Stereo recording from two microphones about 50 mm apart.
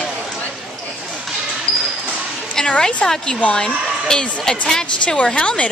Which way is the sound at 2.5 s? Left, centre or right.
Centre.